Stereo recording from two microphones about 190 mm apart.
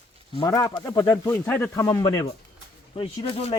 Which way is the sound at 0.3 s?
20° left (ahead or behind).